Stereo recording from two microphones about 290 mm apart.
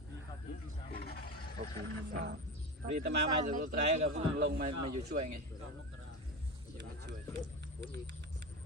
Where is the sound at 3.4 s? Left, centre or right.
Right.